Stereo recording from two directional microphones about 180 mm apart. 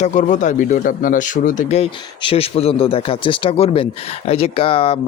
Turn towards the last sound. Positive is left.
turn(degrees=30)  # may be behind; listen again after turning